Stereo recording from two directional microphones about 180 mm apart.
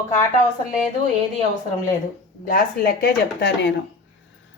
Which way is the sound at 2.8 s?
60° left (ahead or behind).